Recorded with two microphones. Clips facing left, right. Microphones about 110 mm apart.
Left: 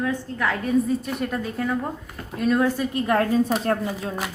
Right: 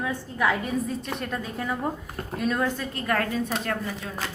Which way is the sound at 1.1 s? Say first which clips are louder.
Left 4 dB; centre (ahead or behind).